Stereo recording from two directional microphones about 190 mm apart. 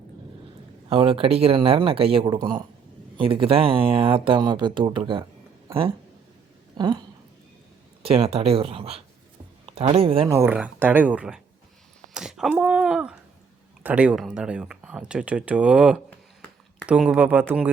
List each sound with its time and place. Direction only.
0.9 s speech: 30° right (ahead or behind)
6.7 s speech: 20° right (ahead or behind)
8.0 s speech: 30° right (ahead or behind)
10.2 s speech: 15° right (ahead or behind)